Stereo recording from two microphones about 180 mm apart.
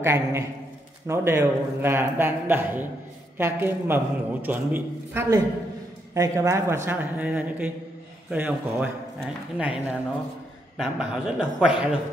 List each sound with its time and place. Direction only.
0.0 s a man's voice: 15° right (ahead or behind)